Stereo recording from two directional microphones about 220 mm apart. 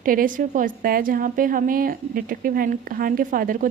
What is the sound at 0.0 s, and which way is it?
A woman's voice, 40° right (ahead or behind).